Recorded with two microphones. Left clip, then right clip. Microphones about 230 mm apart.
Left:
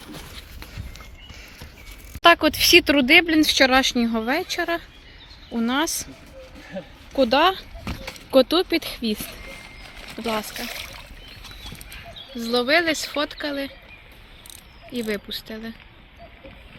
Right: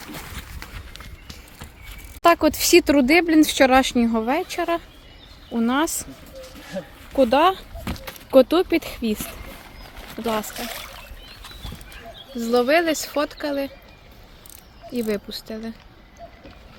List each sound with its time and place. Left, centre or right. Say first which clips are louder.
2.2 s speech: left 2 dB; centre
12.4 s speech: right 2 dB; centre
14.9 s speech: right 2 dB; centre